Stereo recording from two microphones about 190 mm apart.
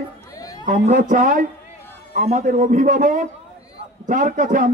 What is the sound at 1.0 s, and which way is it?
Speech, 45° right (ahead or behind).